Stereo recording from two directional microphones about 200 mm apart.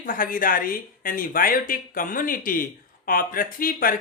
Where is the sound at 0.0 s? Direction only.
45° left (ahead or behind).